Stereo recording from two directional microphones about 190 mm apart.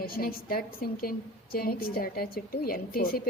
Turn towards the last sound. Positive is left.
turn(degrees=50)  # may be behind; listen again after turning